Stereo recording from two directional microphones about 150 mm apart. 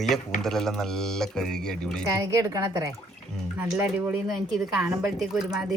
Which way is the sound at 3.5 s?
10° right (ahead or behind).